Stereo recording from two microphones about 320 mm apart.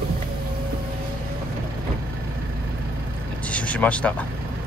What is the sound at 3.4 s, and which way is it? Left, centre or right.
Vehicle, centre.